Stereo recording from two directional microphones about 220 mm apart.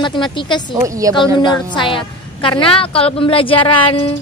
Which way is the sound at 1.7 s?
25° left (ahead or behind).